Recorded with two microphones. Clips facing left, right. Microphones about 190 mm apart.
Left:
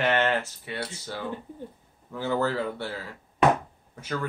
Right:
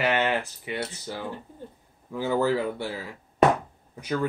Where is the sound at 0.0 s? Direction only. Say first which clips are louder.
Even; 10° right (ahead or behind).